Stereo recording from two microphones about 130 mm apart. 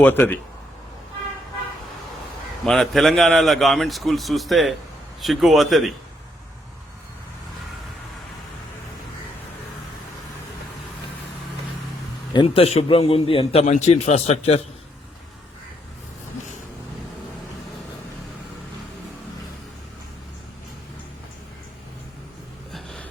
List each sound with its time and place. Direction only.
0.0 s speech: 15° left (ahead or behind)
2.6 s a man's voice: 5° left (ahead or behind)
12.3 s speech: 35° left (ahead or behind)
12.6 s a man's voice: 50° left (ahead or behind)
22.7 s a sound: centre (ahead or behind)